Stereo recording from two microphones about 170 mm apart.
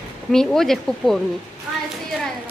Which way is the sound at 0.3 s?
Centre (ahead or behind).